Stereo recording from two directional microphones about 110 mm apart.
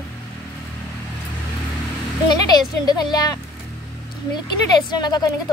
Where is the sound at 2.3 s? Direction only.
40° left (ahead or behind).